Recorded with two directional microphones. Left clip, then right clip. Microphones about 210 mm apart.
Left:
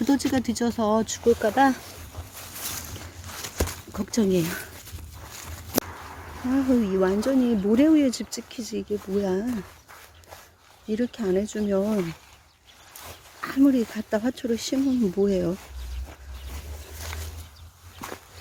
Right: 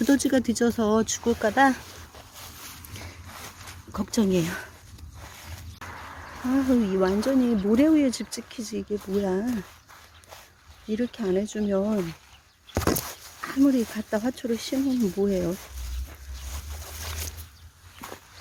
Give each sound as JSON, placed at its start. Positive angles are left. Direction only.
{"t": 0.0, "sound": "speech", "side_deg": 5}
{"t": 3.9, "sound": "speech", "side_deg": -5}
{"t": 6.5, "sound": "speech", "side_deg": 0}
{"t": 10.9, "sound": "speech", "side_deg": 5}
{"t": 13.4, "sound": "speech", "side_deg": 5}